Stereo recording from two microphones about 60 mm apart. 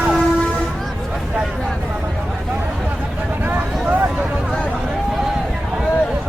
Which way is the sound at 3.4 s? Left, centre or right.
Right.